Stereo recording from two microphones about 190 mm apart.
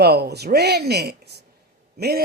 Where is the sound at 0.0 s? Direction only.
55° right (ahead or behind).